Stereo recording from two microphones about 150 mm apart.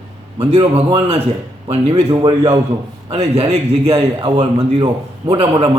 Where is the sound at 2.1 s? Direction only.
25° right (ahead or behind).